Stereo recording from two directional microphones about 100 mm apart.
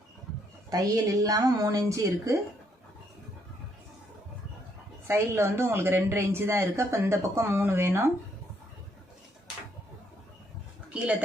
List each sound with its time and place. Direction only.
0.7 s a woman's voice: 35° right (ahead or behind)
5.0 s a woman's voice: 25° right (ahead or behind)